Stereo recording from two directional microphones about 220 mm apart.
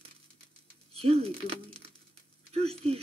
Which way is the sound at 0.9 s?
25° right (ahead or behind).